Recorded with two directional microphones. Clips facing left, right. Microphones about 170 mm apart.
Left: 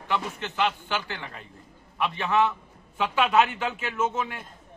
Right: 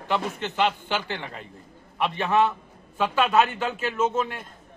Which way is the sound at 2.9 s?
15° left (ahead or behind).